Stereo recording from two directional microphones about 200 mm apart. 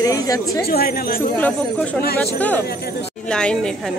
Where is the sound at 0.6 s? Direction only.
50° left (ahead or behind).